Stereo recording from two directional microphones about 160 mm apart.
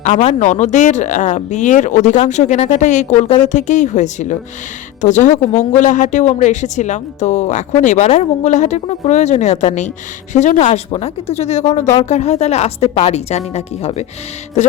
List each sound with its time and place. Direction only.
0.0 s speech: 45° left (ahead or behind)